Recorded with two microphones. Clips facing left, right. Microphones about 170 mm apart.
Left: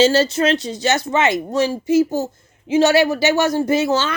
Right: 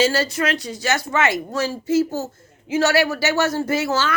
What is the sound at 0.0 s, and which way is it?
Speech, 25° left (ahead or behind).